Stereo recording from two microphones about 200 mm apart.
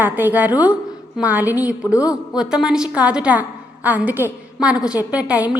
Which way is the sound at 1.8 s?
15° left (ahead or behind).